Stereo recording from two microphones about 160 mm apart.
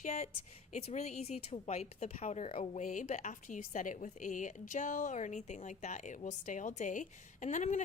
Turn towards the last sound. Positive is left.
turn(degrees=50)  # may be behind; listen again after turning